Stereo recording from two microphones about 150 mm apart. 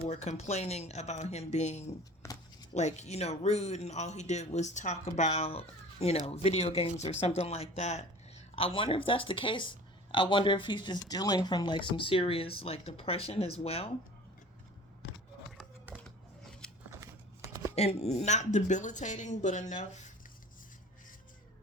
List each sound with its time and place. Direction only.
0.1 s speech: 45° left (ahead or behind)
2.2 s shuffling cards: 20° left (ahead or behind)
2.7 s speech: 50° left (ahead or behind)
16.0 s scissors: 5° left (ahead or behind)
17.0 s a sound: 20° right (ahead or behind)
17.7 s speech: 45° left (ahead or behind)